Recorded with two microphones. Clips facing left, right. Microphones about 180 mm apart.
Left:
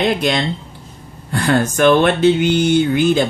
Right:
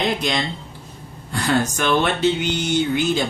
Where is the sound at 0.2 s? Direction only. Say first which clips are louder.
Left 5 dB; 60° left (ahead or behind).